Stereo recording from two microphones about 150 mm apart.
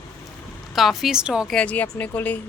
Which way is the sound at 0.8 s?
Centre (ahead or behind).